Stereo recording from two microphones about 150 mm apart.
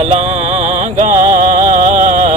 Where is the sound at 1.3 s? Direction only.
65° right (ahead or behind).